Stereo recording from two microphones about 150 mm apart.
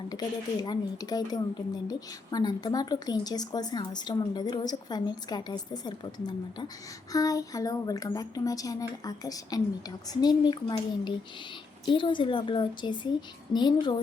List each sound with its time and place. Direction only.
0.1 s a woman's voice: 25° left (ahead or behind)